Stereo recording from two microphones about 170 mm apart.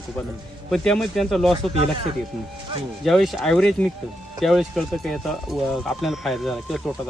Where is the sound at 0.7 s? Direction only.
5° left (ahead or behind).